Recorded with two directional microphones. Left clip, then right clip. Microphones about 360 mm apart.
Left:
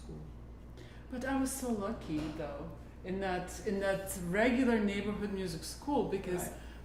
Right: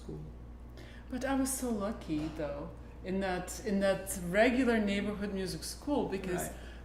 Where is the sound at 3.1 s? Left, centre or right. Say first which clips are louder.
Right 1 dB; centre.